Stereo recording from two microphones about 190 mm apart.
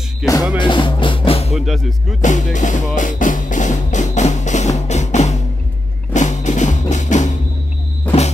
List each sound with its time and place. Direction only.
0.2 s speech: centre (ahead or behind)
0.6 s music: 25° left (ahead or behind)
1.5 s speech: centre (ahead or behind)
2.2 s music: 40° left (ahead or behind)